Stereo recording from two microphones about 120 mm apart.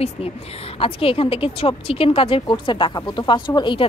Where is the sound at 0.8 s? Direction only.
50° left (ahead or behind).